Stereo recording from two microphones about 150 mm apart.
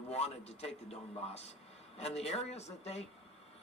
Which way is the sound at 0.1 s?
45° left (ahead or behind).